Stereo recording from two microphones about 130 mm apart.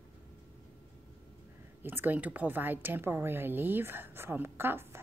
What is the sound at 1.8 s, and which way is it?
A woman's voice, 15° right (ahead or behind).